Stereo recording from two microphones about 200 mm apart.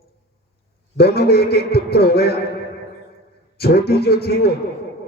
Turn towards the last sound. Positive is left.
turn(degrees=50)  # may be behind; listen again after turning